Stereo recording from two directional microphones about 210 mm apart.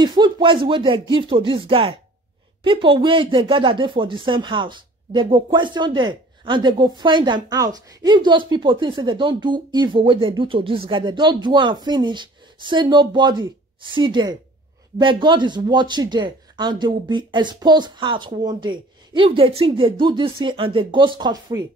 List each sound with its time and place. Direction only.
0.0 s speech: 20° right (ahead or behind)